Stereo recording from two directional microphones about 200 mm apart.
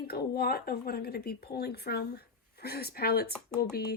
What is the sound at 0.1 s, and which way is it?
Speech, 50° left (ahead or behind).